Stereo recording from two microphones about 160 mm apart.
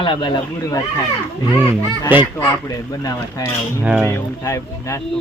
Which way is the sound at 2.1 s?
10° right (ahead or behind).